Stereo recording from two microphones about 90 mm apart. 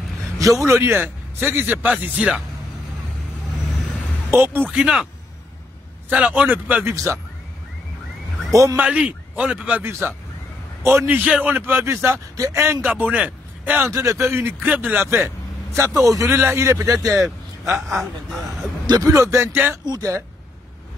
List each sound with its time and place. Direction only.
0.7 s speech: 30° right (ahead or behind); by 2.4 s 15° right (ahead or behind)
4.3 s speech: 30° right (ahead or behind)
4.6 s a man's voice: 10° right (ahead or behind)
6.0 s a man's voice: 15° right (ahead or behind)
6.9 s speech: 30° right (ahead or behind)
8.5 s a man's voice: 35° right (ahead or behind)
8.7 s a man's voice: 15° right (ahead or behind)
9.8 s a man's voice: 25° right (ahead or behind)
13.8 s speech: 35° right (ahead or behind)
17.7 s speech: centre (ahead or behind)
18.9 s speech: 45° right (ahead or behind); by 19.8 s 25° right (ahead or behind)
19.9 s speech: 40° right (ahead or behind)